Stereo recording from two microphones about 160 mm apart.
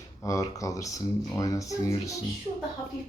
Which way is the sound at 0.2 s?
20° left (ahead or behind).